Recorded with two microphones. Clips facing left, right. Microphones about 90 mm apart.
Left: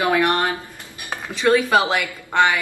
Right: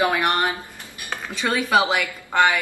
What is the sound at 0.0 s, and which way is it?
Speech, 15° right (ahead or behind).